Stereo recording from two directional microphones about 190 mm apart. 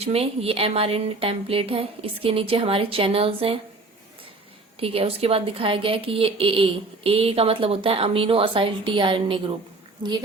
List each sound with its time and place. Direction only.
0.0 s a woman's voice: 30° right (ahead or behind)
4.8 s a woman's voice: 30° right (ahead or behind)